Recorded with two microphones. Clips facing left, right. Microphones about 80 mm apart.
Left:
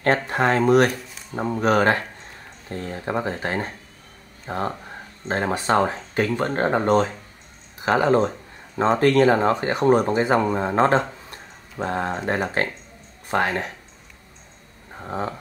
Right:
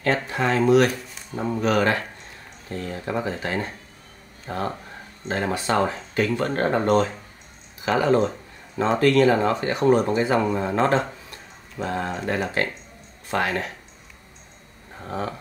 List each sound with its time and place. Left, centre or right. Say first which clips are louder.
0.3 s speech: even; left; by 7.1 s centre
7.8 s speech: left 1 dB; left
15.0 s speech: left 1 dB; centre